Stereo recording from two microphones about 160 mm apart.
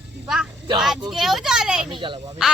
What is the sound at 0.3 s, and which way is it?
A woman's voice, 5° right (ahead or behind).